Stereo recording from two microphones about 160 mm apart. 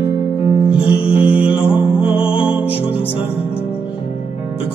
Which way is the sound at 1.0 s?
35° left (ahead or behind).